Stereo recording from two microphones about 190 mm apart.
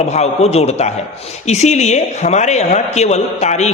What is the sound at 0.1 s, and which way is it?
A woman's voice, 35° left (ahead or behind).